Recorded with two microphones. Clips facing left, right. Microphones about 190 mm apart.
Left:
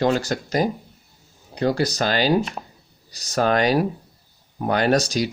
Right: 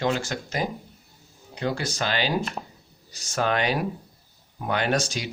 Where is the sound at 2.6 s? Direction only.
5° left (ahead or behind).